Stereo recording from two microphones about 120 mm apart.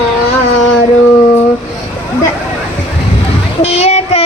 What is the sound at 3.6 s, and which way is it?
Child singing, 65° left (ahead or behind).